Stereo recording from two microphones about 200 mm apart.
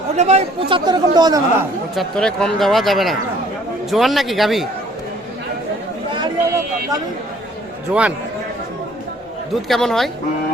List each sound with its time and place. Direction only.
0.2 s speech: 35° right (ahead or behind)
2.0 s speech: 5° left (ahead or behind)
6.1 s chatter: 20° right (ahead or behind)
7.9 s speech: 5° right (ahead or behind)
9.6 s speech: centre (ahead or behind)